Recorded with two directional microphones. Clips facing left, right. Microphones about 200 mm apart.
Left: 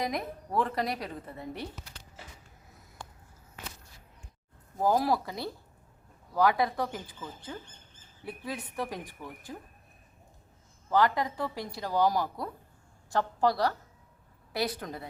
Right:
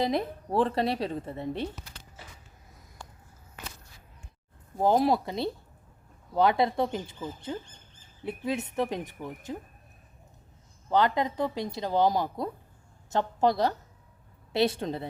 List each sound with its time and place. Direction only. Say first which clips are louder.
0.0 s speech: right 5 dB; 30° right (ahead or behind)
4.8 s speech: right 3 dB; 25° right (ahead or behind)
10.8 s speech: right 1 dB; 20° right (ahead or behind)